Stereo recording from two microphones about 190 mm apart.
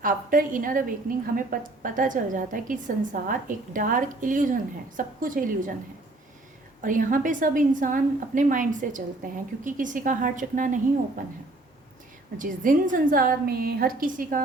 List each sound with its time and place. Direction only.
0.0 s a woman's voice: 45° right (ahead or behind)
6.8 s a woman's voice: 45° right (ahead or behind)
12.4 s a woman's voice: 45° right (ahead or behind)